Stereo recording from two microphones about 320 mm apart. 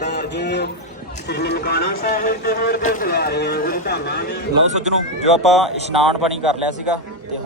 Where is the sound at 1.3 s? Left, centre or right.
Left.